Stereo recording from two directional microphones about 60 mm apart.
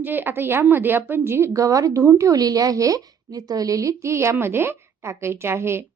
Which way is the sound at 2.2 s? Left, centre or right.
Right.